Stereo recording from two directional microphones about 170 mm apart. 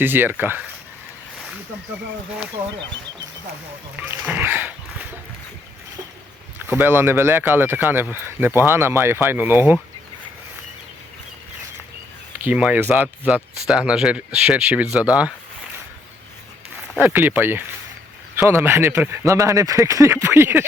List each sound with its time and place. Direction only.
0.0 s speech: 10° right (ahead or behind)
3.9 s a sound: 10° right (ahead or behind)
6.6 s speech: 10° right (ahead or behind)
12.5 s speech: 10° right (ahead or behind)
17.0 s speech: 10° right (ahead or behind)